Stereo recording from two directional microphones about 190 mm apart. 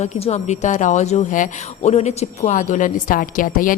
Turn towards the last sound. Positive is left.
turn(degrees=45)  # may be behind; listen again after turning